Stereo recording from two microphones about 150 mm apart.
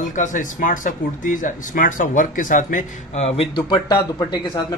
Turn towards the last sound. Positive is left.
turn(degrees=30)  # may be behind; listen again after turning